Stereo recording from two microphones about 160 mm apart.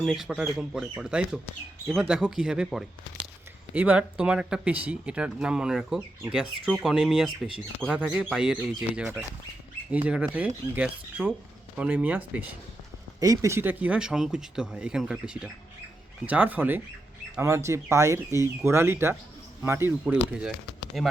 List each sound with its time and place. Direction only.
0.0 s speech: centre (ahead or behind)
13.1 s speech: 20° right (ahead or behind)
20.9 s speech: centre (ahead or behind)